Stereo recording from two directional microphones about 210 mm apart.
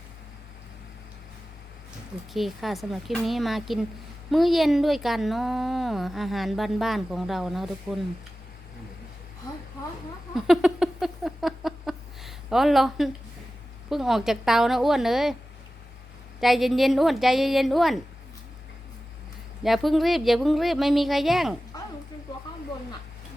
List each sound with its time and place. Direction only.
2.3 s speech: centre (ahead or behind)
10.3 s a sound: centre (ahead or behind)
13.9 s speech: centre (ahead or behind)
16.4 s speech: centre (ahead or behind)
19.6 s speech: centre (ahead or behind)
21.7 s a sound: 20° left (ahead or behind)